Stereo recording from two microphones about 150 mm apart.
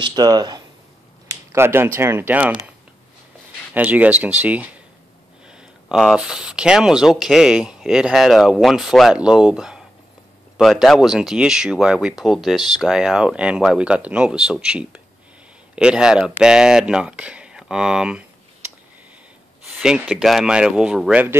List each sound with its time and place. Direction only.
0.0 s speech: 25° right (ahead or behind); by 2.7 s 10° right (ahead or behind)
3.7 s speech: 10° right (ahead or behind)
19.8 s speech: 5° right (ahead or behind)